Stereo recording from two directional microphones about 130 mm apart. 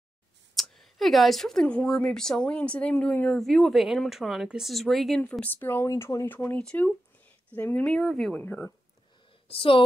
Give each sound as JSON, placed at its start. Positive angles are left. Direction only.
{"t": 0.6, "sound": "speech", "side_deg": 0}
{"t": 5.4, "sound": "speech", "side_deg": 15}
{"t": 8.4, "sound": "speech", "side_deg": 15}
{"t": 9.5, "sound": "speech", "side_deg": 45}